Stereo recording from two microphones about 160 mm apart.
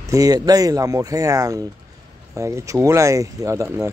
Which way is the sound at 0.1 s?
20° right (ahead or behind).